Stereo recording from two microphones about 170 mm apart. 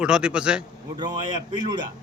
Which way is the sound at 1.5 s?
25° right (ahead or behind).